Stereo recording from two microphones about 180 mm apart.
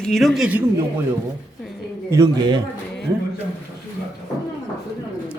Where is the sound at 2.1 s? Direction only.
20° right (ahead or behind).